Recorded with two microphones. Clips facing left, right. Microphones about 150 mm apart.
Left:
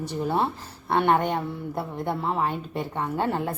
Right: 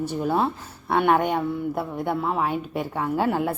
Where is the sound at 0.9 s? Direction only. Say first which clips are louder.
Right 2 dB; 5° right (ahead or behind).